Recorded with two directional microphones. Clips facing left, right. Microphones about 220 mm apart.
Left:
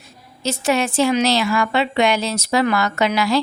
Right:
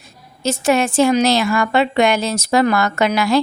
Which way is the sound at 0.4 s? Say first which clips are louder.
Right 3 dB; 50° right (ahead or behind).